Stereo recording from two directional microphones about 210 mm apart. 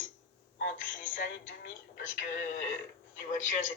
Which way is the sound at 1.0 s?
40° left (ahead or behind).